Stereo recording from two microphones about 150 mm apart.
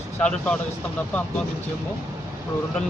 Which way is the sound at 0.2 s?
10° left (ahead or behind).